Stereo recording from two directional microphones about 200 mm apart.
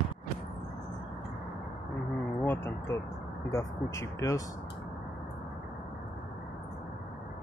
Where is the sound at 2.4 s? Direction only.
10° left (ahead or behind).